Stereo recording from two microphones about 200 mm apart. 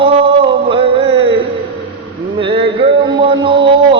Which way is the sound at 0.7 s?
25° right (ahead or behind).